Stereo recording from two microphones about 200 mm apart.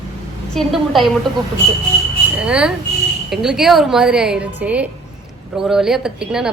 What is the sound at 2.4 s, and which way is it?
A woman's voice, 5° right (ahead or behind).